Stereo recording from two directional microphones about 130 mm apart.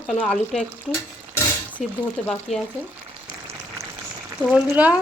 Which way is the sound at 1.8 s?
Centre (ahead or behind).